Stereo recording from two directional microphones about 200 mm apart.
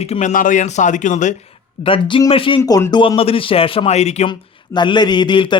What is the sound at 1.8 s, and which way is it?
Speech, 25° left (ahead or behind).